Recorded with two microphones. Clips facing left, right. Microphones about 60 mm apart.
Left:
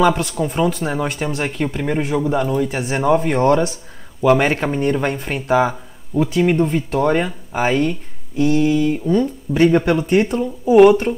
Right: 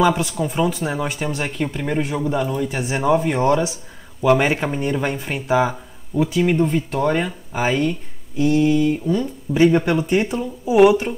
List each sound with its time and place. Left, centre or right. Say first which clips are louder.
0.0 s speech: left 2 dB; centre
1.6 s speech: left 2 dB; centre
1.9 s speech: left 3 dB; centre